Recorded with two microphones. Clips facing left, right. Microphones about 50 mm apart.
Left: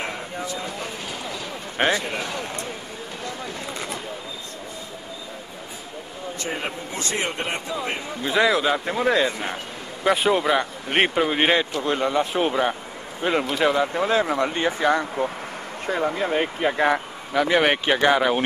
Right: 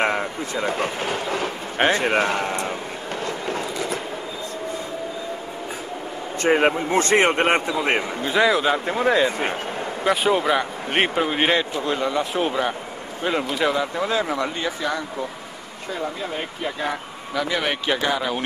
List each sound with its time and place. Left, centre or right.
0.0 s speech: right
3.3 s a sound: right
6.5 s speech: right
8.2 s speech: centre
11.8 s speech: centre
13.7 s speech: centre
14.4 s speech: left
17.3 s speech: left